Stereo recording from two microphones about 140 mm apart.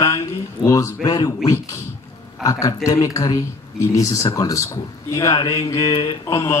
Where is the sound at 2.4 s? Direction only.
25° left (ahead or behind).